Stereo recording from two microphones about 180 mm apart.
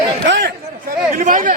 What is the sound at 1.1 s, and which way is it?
Speech, 50° right (ahead or behind).